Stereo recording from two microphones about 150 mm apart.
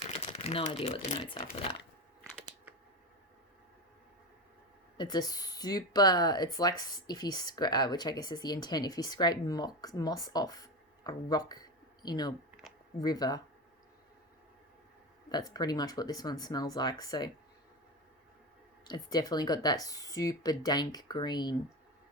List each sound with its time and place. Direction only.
0.1 s speech: 40° left (ahead or behind)
2.3 s a sound: 20° right (ahead or behind)
4.9 s speech: 25° left (ahead or behind)
12.6 s a sound: centre (ahead or behind)
13.0 s speech: 25° left (ahead or behind)
15.3 s speech: 25° left (ahead or behind)
18.9 s speech: 25° left (ahead or behind)